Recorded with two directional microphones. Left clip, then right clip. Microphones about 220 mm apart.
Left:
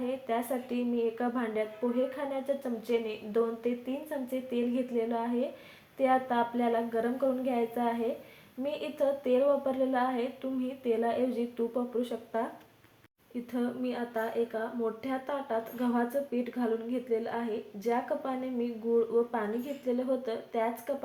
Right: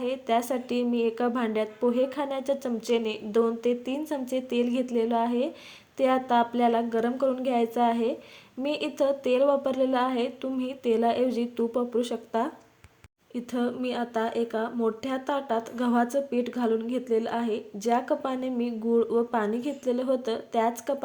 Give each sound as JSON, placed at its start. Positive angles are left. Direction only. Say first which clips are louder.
{"t": 0.0, "sound": "speech", "louder": "right 6 dB", "side_deg": -50}
{"t": 13.5, "sound": "speech", "louder": "right 5 dB", "side_deg": -50}